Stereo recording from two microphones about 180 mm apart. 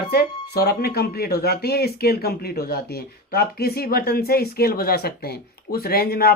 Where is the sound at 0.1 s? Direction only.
60° left (ahead or behind).